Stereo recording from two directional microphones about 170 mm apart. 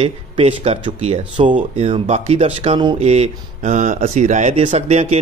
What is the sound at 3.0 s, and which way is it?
Speech, 40° right (ahead or behind).